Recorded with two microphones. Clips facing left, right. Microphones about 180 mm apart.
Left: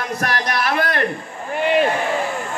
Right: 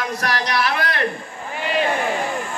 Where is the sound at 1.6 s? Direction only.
50° left (ahead or behind).